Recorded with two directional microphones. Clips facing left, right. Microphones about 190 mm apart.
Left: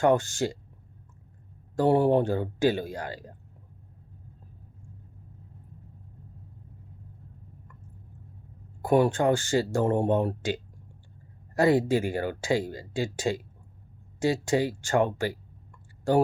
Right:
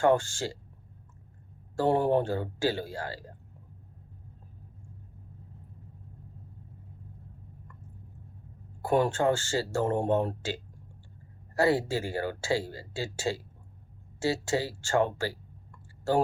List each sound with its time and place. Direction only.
0.0 s speech: 15° left (ahead or behind)
1.7 s speech: 15° left (ahead or behind)
8.8 s speech: 15° left (ahead or behind)